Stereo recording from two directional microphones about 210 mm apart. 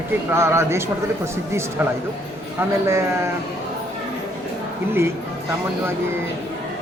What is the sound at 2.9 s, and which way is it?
Speech, 15° right (ahead or behind).